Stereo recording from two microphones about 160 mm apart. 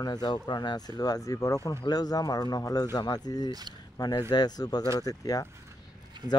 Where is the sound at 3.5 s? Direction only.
25° right (ahead or behind).